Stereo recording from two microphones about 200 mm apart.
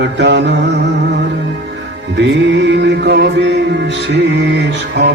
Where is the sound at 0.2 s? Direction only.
60° right (ahead or behind).